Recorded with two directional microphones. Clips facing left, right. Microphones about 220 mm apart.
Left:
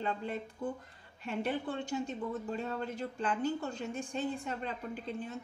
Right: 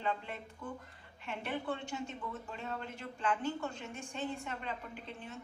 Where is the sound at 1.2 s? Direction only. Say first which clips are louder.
Left 4 dB; 35° left (ahead or behind).